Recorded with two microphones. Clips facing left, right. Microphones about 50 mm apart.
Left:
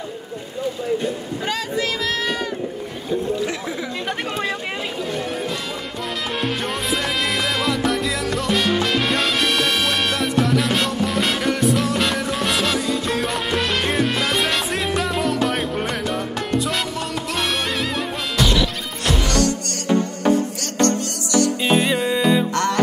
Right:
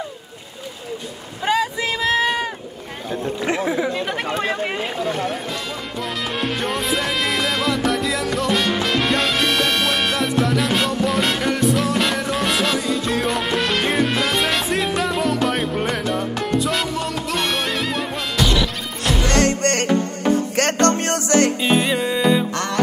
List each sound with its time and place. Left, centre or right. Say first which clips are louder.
1.4 s boat: right 5 dB; centre
3.4 s speech: right 6 dB; right
5.0 s music: right 4 dB; right
6.6 s music: right 1 dB; centre
19.2 s music: right 7 dB; right
21.5 s music: even; centre